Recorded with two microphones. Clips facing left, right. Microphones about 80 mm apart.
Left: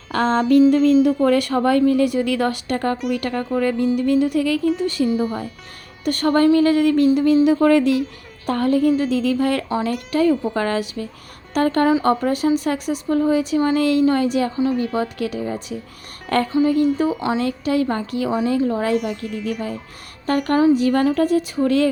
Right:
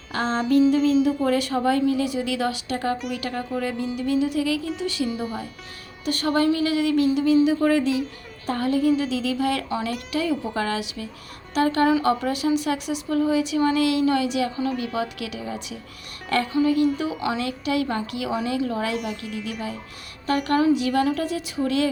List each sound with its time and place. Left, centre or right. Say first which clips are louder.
0.1 s speech: left 5 dB; left
5.0 s speech: left 7 dB; centre
6.1 s speech: left 6 dB; left
7.4 s speech: left 5 dB; left
17.2 s speech: left 5 dB; left
19.2 s speech: left 4 dB; centre
20.2 s speech: left 4 dB; left